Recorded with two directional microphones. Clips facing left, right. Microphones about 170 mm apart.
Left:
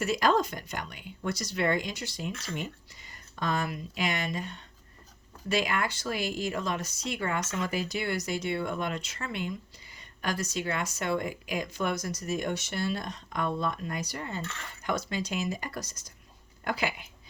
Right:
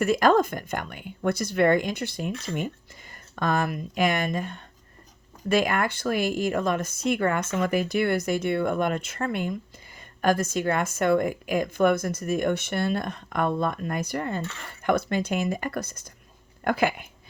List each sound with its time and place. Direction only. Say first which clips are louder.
0.0 s speech: right 6 dB; 50° right (ahead or behind)